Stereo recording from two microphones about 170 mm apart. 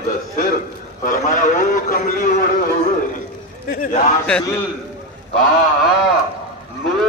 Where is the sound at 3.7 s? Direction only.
55° left (ahead or behind).